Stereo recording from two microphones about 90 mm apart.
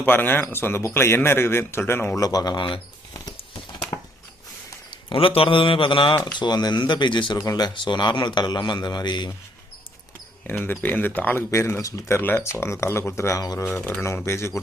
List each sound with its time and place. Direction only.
0.0 s speech: 20° left (ahead or behind)
2.1 s speech: 45° left (ahead or behind)
4.9 s a man's voice: 70° left (ahead or behind)
6.4 s speech: 50° left (ahead or behind)
7.4 s speech: 45° left (ahead or behind)
7.7 s speech: 60° left (ahead or behind)
10.4 s speech: 20° left (ahead or behind)
13.4 s speech: 45° left (ahead or behind)
14.3 s speech: 30° left (ahead or behind)